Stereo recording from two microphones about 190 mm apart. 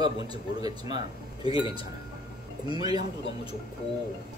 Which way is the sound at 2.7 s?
20° right (ahead or behind).